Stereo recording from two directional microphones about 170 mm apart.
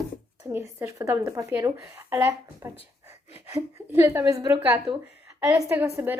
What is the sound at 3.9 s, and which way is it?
Speech, 15° right (ahead or behind).